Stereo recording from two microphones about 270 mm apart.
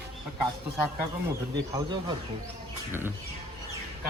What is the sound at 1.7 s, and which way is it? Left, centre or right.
Speech, centre.